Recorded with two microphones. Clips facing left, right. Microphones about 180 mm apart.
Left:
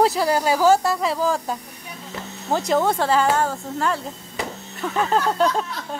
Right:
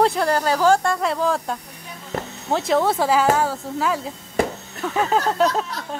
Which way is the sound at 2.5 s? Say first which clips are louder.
Right 1 dB; centre (ahead or behind).